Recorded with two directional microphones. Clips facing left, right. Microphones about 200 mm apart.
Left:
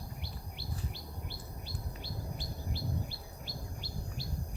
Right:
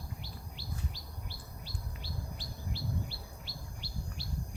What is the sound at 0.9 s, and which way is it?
Chirp, 55° left (ahead or behind).